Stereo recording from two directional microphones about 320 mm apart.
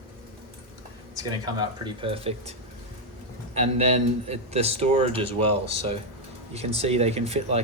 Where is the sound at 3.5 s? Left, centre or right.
Centre.